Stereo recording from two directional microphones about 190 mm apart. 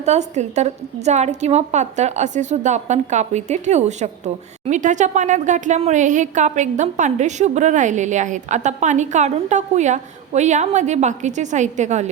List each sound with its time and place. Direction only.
0.0 s speech: 35° right (ahead or behind)